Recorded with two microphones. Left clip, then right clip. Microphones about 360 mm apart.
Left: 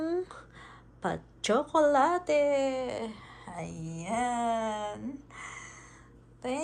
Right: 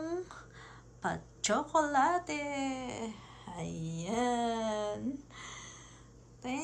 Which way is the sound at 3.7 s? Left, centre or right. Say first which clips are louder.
Even; centre.